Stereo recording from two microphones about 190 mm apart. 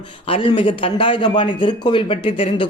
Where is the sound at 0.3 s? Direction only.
30° left (ahead or behind).